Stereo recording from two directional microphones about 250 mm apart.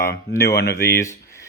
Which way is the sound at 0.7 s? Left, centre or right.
Centre.